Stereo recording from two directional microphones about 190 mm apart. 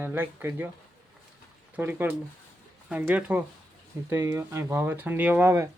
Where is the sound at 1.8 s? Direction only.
10° right (ahead or behind).